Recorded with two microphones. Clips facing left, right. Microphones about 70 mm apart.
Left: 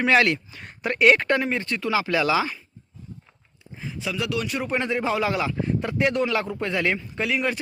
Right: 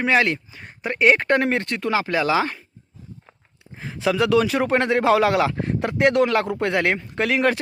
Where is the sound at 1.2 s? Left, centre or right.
Right.